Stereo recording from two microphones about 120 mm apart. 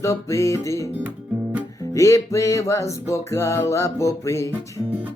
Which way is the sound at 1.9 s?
25° left (ahead or behind).